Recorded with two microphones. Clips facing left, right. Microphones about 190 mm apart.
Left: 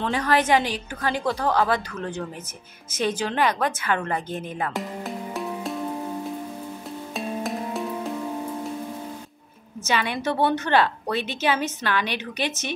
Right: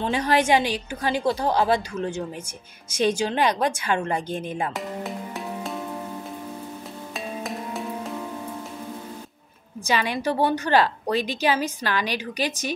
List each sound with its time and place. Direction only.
0.0 s a woman's voice: 15° right (ahead or behind)
3.1 s a woman's voice: 15° right (ahead or behind)
4.7 s music: centre (ahead or behind)
7.2 s music: centre (ahead or behind)
9.8 s a woman's voice: 40° right (ahead or behind)
10.2 s a woman's voice: 10° right (ahead or behind)
10.6 s a woman's voice: 35° right (ahead or behind)